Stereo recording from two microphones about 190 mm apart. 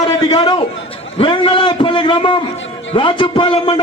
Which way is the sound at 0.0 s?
20° left (ahead or behind).